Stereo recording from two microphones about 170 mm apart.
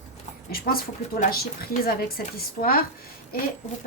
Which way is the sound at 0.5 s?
60° left (ahead or behind).